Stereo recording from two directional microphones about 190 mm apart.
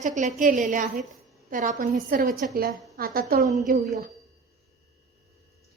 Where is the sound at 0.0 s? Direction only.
40° right (ahead or behind).